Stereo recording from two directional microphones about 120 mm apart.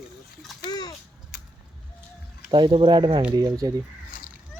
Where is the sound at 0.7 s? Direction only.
35° left (ahead or behind).